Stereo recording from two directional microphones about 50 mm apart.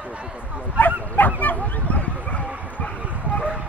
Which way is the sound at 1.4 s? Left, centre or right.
Left.